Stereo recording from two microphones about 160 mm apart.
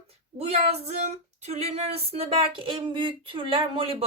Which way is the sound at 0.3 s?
40° right (ahead or behind).